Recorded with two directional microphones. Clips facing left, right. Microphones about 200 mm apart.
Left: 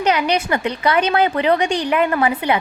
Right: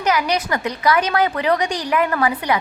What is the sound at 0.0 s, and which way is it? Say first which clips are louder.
A woman's voice: left 2 dB; 30° left (ahead or behind).